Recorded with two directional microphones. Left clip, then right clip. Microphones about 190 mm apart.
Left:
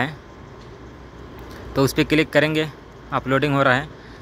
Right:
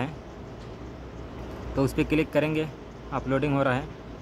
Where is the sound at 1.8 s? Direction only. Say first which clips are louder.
Left 7 dB; 15° left (ahead or behind).